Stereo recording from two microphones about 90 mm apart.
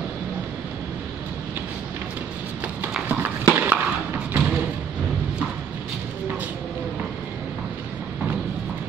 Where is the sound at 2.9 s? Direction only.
15° right (ahead or behind).